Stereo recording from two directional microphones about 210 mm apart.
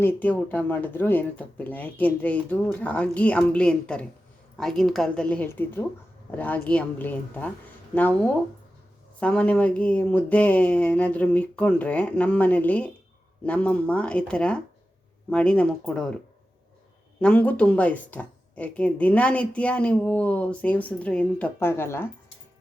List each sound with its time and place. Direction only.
0.0 s a woman's voice: 10° left (ahead or behind)
17.2 s a woman's voice: 5° left (ahead or behind)